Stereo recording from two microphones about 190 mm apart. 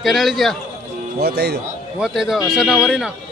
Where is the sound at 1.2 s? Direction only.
60° right (ahead or behind).